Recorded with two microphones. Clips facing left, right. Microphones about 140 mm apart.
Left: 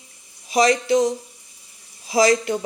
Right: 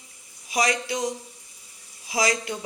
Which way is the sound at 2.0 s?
30° left (ahead or behind).